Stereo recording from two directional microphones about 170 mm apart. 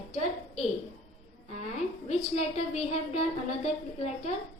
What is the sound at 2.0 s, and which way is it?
A woman's voice, 40° left (ahead or behind).